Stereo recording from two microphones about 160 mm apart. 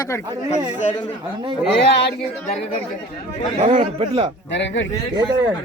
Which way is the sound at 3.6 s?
45° right (ahead or behind).